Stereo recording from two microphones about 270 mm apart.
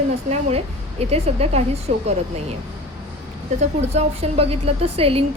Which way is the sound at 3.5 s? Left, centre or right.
Right.